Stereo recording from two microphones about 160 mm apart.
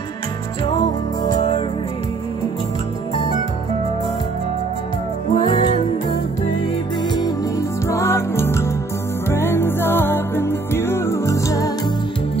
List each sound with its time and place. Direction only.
1.2 s music: 30° left (ahead or behind)
5.3 s music: 35° left (ahead or behind)
7.9 s music: 20° left (ahead or behind)